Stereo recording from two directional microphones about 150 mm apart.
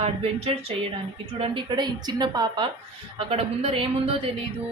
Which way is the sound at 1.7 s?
30° right (ahead or behind).